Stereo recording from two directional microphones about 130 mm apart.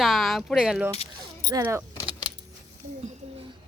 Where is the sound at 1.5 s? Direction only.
25° right (ahead or behind).